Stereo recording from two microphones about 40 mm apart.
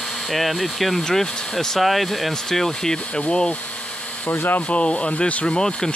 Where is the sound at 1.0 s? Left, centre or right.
Centre.